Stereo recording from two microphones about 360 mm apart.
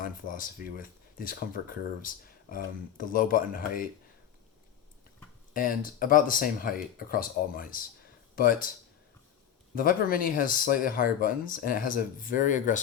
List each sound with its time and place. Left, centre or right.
0.0 s speech: left
5.5 s speech: left
9.7 s speech: left